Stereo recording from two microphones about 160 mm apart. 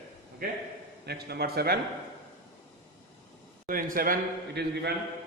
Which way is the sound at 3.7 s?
60° right (ahead or behind).